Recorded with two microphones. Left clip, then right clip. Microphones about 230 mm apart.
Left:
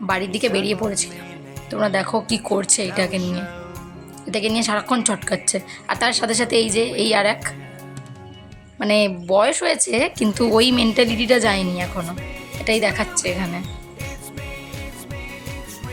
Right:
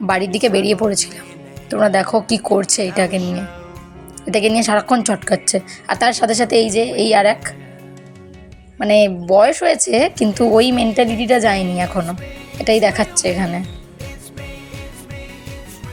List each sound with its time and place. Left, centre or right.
0.1 s a woman's voice: centre
3.2 s speech: centre
4.3 s a woman's voice: centre
8.8 s a woman's voice: centre
13.6 s music: centre